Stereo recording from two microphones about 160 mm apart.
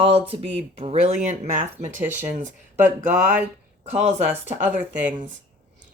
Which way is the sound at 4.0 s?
45° right (ahead or behind).